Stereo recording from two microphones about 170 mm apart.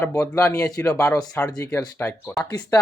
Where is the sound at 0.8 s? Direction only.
5° left (ahead or behind).